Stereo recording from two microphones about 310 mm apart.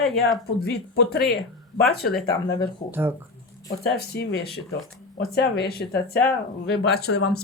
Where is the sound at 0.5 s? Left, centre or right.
Left.